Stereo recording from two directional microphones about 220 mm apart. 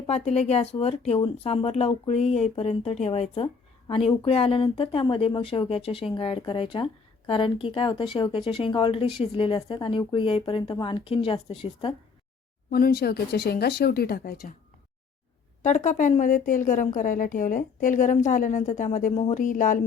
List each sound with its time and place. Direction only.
0.1 s speech: 30° left (ahead or behind)
12.7 s speech: 45° left (ahead or behind)
15.6 s a woman's voice: 35° left (ahead or behind)